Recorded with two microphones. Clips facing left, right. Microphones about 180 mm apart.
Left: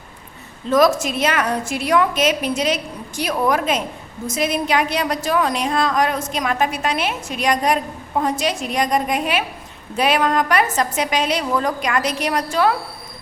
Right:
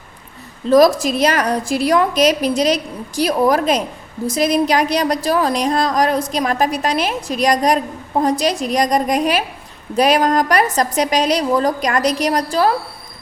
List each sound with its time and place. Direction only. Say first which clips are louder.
0.7 s a woman's voice: right 4 dB; 35° right (ahead or behind)